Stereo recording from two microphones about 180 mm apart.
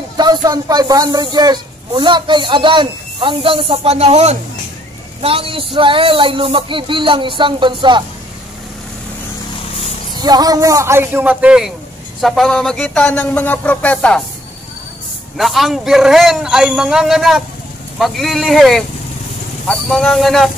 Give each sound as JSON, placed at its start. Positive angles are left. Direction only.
{"t": 0.2, "sound": "speech", "side_deg": -20}
{"t": 10.1, "sound": "a man's voice", "side_deg": -20}
{"t": 15.3, "sound": "a man's voice", "side_deg": 0}